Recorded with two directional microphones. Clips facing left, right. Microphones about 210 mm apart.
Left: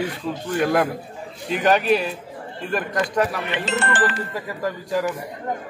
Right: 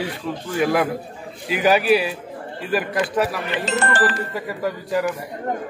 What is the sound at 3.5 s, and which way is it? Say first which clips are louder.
Speech: right 2 dB; 40° right (ahead or behind).